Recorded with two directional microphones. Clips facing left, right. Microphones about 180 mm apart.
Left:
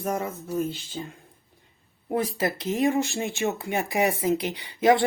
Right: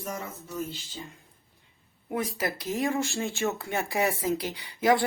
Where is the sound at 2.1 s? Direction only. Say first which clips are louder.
Left 4 dB; 30° left (ahead or behind).